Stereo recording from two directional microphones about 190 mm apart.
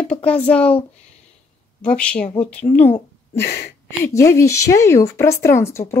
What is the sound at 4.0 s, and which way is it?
Speech, 15° left (ahead or behind).